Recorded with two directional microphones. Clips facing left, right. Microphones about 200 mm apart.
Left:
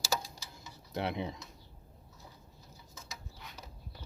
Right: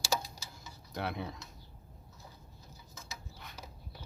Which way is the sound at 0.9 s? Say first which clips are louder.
Left 3 dB; 25° left (ahead or behind).